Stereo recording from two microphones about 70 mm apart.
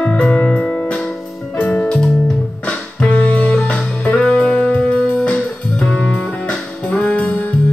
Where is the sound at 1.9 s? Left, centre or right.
Centre.